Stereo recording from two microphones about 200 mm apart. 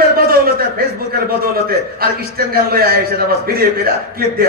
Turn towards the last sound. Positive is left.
turn(degrees=-50)  # may be behind; listen again after turning